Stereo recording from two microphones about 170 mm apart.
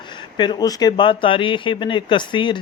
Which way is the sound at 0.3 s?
25° left (ahead or behind).